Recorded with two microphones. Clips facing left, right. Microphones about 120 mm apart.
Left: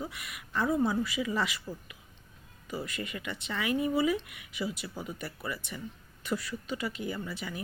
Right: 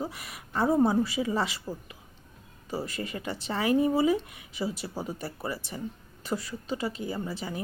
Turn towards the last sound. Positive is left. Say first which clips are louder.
# right 3 dB
turn(degrees=-30)  # may be behind; listen again after turning